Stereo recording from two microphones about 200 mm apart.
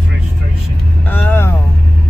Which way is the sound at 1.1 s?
10° left (ahead or behind).